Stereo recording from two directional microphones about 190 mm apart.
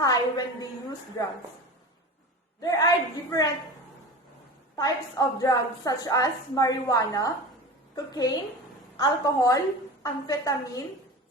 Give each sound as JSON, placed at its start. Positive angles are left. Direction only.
{"t": 0.0, "sound": "a woman's voice", "side_deg": 20}
{"t": 2.6, "sound": "a woman's voice", "side_deg": 20}
{"t": 4.8, "sound": "a woman's voice", "side_deg": 20}